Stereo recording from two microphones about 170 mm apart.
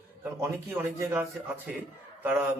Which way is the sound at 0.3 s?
15° right (ahead or behind).